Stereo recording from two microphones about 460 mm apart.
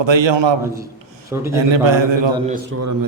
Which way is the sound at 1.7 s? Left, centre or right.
Right.